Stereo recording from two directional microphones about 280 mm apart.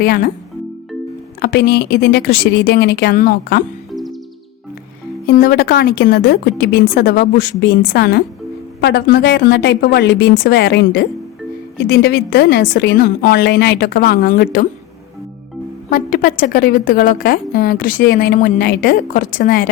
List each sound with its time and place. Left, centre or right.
0.0 s a woman's voice: left
1.4 s a woman's voice: left
3.9 s music: centre
5.2 s a woman's voice: left
15.9 s a woman's voice: left